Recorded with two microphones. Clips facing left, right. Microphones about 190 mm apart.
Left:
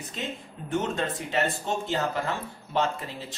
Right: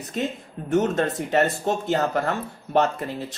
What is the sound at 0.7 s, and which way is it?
Speech, 40° right (ahead or behind).